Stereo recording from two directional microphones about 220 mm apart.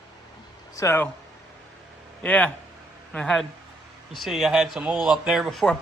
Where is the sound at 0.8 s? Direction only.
10° left (ahead or behind).